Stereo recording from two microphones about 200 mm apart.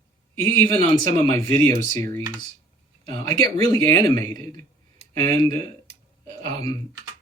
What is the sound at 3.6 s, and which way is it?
Speech, 20° left (ahead or behind).